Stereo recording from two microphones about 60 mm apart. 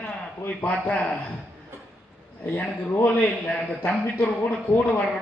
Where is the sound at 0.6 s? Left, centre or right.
Left.